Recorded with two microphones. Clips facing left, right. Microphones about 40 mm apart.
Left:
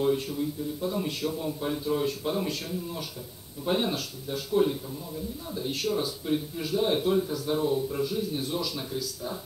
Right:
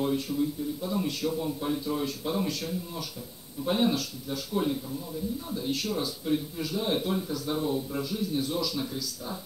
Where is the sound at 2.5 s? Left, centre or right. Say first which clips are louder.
Even; left.